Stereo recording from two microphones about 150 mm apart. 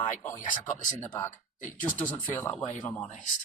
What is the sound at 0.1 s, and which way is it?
A man's voice, 20° left (ahead or behind).